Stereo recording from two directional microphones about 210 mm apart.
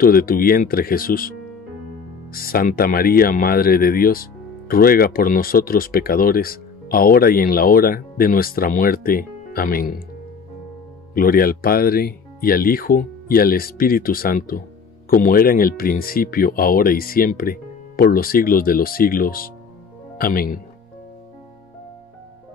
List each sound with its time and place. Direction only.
0.0 s speech: 45° left (ahead or behind)
2.3 s speech: 45° left (ahead or behind)
11.1 s speech: 45° left (ahead or behind)